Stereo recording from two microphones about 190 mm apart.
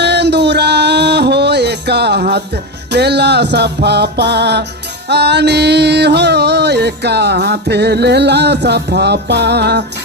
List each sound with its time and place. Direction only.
0.0 s music: 60° right (ahead or behind)